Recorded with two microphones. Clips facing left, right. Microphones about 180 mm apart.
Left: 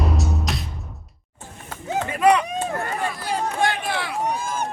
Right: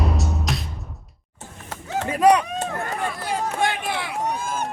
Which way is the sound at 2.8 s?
5° left (ahead or behind).